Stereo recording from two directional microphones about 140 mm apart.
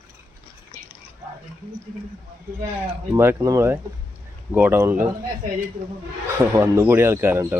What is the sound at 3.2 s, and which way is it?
Speech, 20° right (ahead or behind).